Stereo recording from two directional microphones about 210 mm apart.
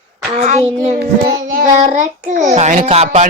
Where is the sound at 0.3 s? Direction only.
35° right (ahead or behind).